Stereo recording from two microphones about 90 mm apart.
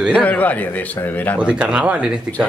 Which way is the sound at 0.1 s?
15° left (ahead or behind).